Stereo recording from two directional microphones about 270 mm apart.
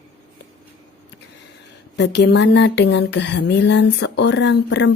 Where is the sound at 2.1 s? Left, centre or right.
Left.